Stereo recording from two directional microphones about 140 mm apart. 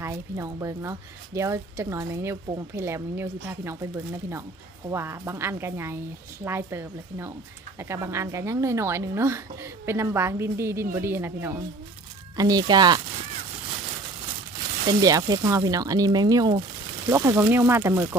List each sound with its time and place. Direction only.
0.0 s speech: 20° right (ahead or behind)
14.8 s speech: 25° right (ahead or behind)
17.1 s speech: 20° right (ahead or behind)